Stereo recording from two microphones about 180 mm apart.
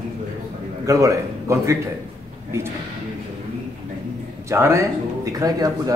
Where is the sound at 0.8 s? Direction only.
15° right (ahead or behind).